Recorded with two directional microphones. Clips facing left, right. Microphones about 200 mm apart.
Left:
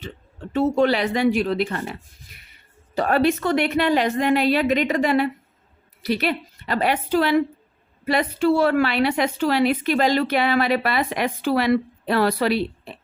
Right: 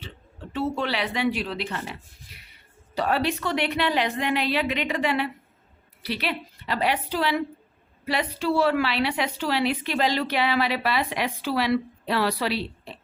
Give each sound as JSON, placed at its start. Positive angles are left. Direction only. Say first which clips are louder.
{"t": 0.5, "sound": "a woman's voice", "louder": "left 8 dB", "side_deg": 45}
{"t": 2.9, "sound": "a woman's voice", "louder": "left 5 dB", "side_deg": 50}